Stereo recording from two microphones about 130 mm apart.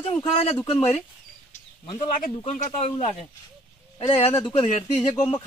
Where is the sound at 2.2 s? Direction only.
70° left (ahead or behind).